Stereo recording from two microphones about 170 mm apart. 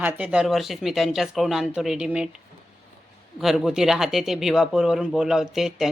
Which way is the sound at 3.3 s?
Centre (ahead or behind).